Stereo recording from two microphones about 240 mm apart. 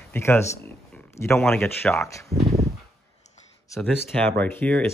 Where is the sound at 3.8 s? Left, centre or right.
Centre.